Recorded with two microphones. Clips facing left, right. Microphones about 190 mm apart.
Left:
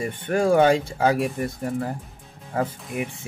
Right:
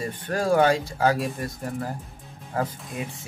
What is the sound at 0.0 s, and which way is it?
Speech, 20° left (ahead or behind).